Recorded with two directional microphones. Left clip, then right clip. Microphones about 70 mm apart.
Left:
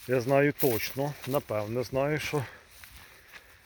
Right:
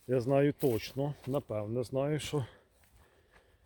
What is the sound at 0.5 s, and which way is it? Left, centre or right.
Speech, centre.